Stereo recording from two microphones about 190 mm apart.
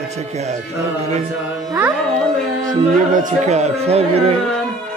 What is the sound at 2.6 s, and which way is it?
Music, 40° right (ahead or behind).